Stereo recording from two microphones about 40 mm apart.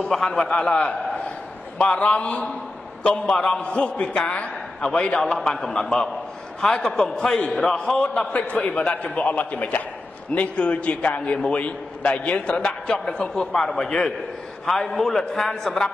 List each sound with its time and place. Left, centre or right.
0.0 s a man's voice: centre; by 3.3 s left
3.3 s a man's voice: centre
3.6 s a man's voice: left
5.2 s a man's voice: centre
8.0 s a man's voice: left
10.5 s a man's voice: left
13.4 s a man's voice: centre
14.7 s a man's voice: centre